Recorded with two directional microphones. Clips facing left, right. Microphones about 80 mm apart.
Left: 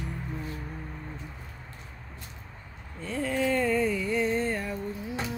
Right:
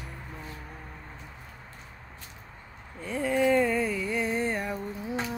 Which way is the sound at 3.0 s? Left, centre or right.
Centre.